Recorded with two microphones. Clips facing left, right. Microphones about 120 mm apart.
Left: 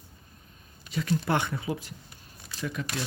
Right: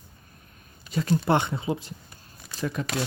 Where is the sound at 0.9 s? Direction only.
35° right (ahead or behind).